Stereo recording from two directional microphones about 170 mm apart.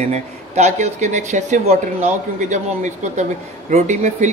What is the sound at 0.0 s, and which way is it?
Speech, 40° right (ahead or behind).